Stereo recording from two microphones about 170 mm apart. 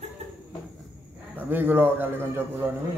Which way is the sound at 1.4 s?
10° right (ahead or behind).